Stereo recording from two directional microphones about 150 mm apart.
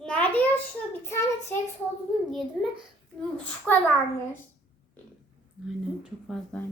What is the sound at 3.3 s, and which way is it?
Speech, 5° left (ahead or behind).